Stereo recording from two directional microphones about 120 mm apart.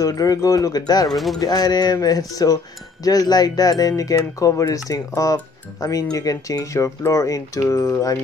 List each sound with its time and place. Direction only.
0.0 s speech: 30° left (ahead or behind)
1.1 s bird: centre (ahead or behind)
1.4 s speech: 35° left (ahead or behind)